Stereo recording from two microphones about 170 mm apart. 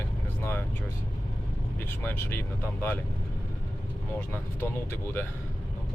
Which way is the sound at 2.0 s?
10° left (ahead or behind).